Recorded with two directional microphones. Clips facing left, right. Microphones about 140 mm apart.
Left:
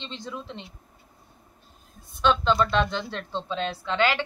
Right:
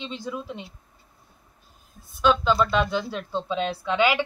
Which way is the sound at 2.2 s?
5° right (ahead or behind).